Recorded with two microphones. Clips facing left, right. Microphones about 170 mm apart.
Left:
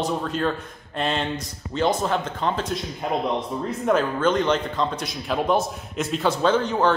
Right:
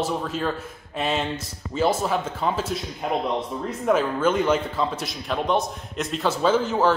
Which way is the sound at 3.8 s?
5° right (ahead or behind).